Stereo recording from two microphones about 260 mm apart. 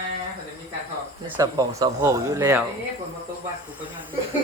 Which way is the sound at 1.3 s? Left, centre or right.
Centre.